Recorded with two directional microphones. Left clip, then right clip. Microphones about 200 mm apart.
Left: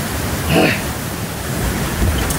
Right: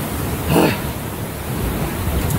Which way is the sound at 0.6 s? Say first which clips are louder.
Left 1 dB; 20° right (ahead or behind).